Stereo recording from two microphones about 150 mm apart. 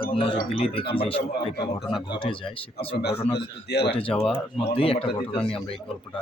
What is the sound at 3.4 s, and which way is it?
Speech, 90° left.